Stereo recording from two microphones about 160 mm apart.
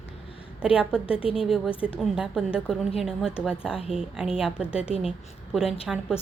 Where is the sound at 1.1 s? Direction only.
35° left (ahead or behind).